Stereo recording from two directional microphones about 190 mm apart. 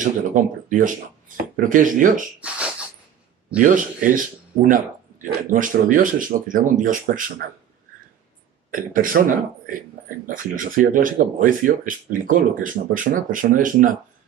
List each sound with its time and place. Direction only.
0.0 s speech: 45° right (ahead or behind)
2.4 s a sound: 5° right (ahead or behind)
3.6 s speech: 45° right (ahead or behind)
8.7 s speech: 45° right (ahead or behind)
10.2 s speech: 45° right (ahead or behind)